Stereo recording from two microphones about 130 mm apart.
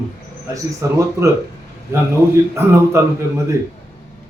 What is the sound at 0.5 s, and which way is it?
Speech, 25° right (ahead or behind).